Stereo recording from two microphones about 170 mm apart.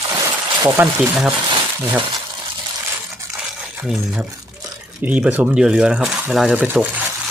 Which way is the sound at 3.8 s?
Centre (ahead or behind).